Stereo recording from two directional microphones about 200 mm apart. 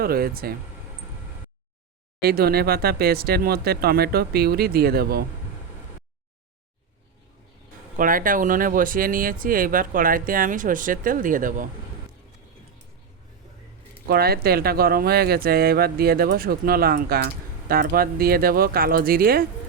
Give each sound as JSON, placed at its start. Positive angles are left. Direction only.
{"t": 0.0, "sound": "speech", "side_deg": -50}
{"t": 2.2, "sound": "speech", "side_deg": -50}
{"t": 7.9, "sound": "speech", "side_deg": -45}
{"t": 14.1, "sound": "speech", "side_deg": -50}